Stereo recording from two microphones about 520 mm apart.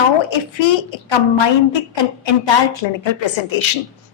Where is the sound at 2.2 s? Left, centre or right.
Left.